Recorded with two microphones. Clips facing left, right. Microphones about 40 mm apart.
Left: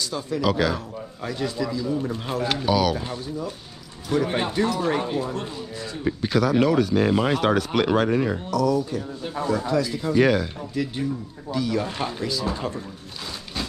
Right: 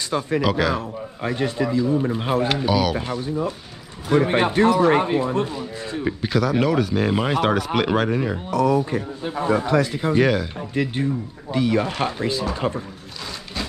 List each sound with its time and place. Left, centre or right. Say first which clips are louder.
0.0 s speech: right 5 dB; right
0.4 s speech: left 1 dB; centre
0.7 s speech: right 4 dB; right
2.4 s speech: left 3 dB; centre
3.0 s speech: right 6 dB; right
6.2 s speech: left 1 dB; centre
8.5 s speech: right 3 dB; right
10.2 s speech: even; centre
10.7 s speech: right 5 dB; right